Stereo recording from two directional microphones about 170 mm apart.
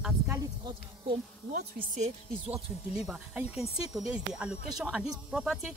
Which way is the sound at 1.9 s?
40° right (ahead or behind).